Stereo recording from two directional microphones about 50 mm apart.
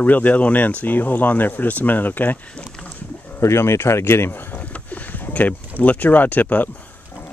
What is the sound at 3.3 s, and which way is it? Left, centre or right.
Speech, left.